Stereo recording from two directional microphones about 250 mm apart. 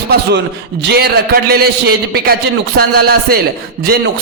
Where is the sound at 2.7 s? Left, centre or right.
Right.